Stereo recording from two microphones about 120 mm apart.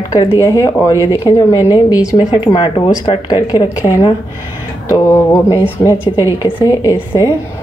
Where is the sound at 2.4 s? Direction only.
45° left (ahead or behind).